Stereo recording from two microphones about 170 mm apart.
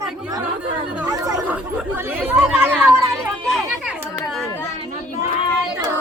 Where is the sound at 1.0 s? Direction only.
20° right (ahead or behind).